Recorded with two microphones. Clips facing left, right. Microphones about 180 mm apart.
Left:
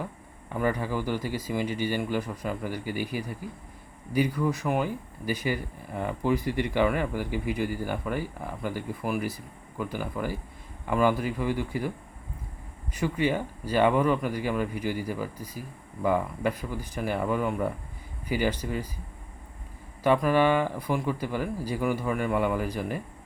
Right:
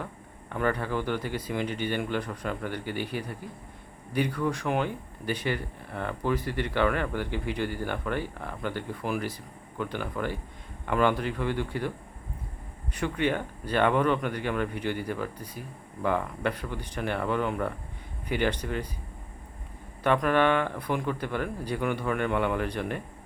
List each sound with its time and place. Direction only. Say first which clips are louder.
0.5 s speech: even; 10° left (ahead or behind)
12.9 s speech: left 1 dB; 10° left (ahead or behind)
20.1 s speech: left 1 dB; 5° left (ahead or behind)